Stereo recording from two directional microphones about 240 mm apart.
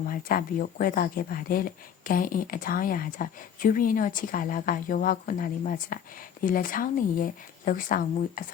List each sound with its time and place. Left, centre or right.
0.1 s a woman's voice: left